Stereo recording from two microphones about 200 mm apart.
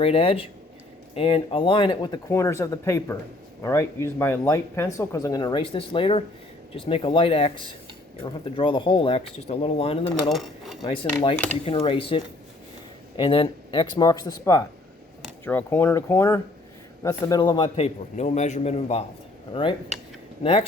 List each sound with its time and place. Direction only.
0.0 s a man's voice: 30° left (ahead or behind)
10.2 s speech: centre (ahead or behind)
10.8 s a man's voice: 25° left (ahead or behind)
20.4 s a man's voice: 30° left (ahead or behind)